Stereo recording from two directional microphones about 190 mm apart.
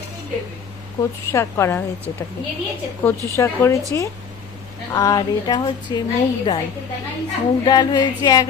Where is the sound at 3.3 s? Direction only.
15° left (ahead or behind).